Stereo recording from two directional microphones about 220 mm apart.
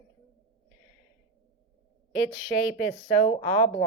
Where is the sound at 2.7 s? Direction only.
35° left (ahead or behind).